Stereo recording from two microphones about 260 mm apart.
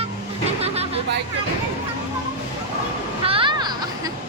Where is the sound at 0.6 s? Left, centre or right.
Right.